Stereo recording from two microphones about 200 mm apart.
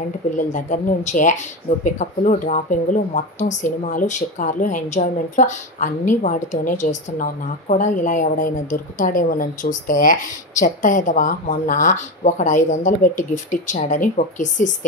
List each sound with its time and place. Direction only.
0.4 s speech: 40° left (ahead or behind)